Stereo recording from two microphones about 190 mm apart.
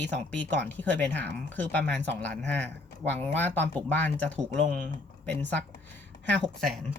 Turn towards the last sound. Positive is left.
turn(degrees=0)  # may be behind; listen again after turning